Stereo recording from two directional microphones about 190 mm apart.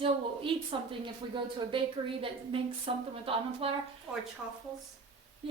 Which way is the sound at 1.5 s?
30° right (ahead or behind).